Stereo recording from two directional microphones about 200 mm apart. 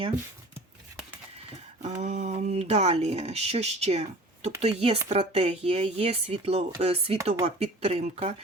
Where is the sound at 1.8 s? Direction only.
35° right (ahead or behind).